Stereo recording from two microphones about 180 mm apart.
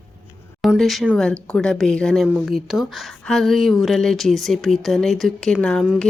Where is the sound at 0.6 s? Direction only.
Centre (ahead or behind).